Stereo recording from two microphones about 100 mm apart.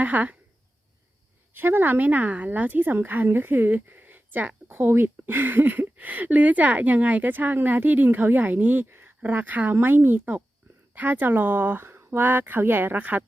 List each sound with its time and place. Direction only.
0.0 s speech: 15° right (ahead or behind)
1.5 s a woman's voice: 20° right (ahead or behind)